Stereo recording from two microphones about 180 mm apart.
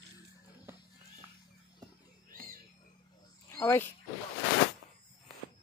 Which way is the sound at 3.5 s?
15° left (ahead or behind).